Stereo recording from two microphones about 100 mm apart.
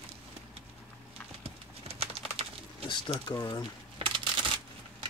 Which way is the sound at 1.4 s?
80° right.